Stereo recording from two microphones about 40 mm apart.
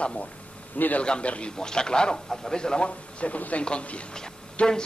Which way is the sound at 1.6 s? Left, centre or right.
Centre.